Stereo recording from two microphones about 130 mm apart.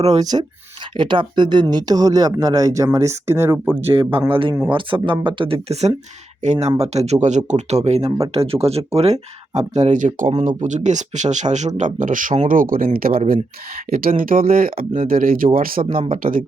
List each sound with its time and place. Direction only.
0.2 s speech: 30° right (ahead or behind)
4.3 s speech: 45° right (ahead or behind); by 10.1 s 65° right (ahead or behind)
10.2 s speech: 85° right
10.6 s speech: 65° right (ahead or behind)
11.8 s speech: 80° right